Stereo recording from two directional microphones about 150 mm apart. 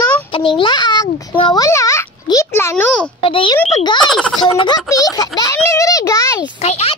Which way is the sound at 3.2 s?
35° left (ahead or behind).